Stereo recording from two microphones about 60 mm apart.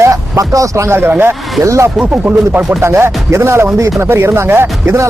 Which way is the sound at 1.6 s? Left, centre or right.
Right.